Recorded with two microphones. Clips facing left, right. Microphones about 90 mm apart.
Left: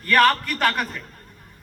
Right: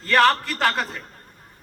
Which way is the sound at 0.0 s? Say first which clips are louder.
Even; 20° right (ahead or behind).